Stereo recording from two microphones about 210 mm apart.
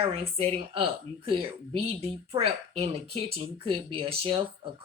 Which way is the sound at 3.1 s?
25° right (ahead or behind).